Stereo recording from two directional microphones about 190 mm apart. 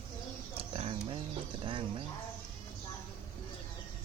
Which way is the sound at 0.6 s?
30° right (ahead or behind).